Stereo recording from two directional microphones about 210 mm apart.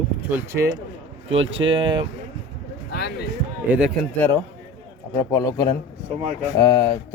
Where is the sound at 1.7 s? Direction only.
20° right (ahead or behind).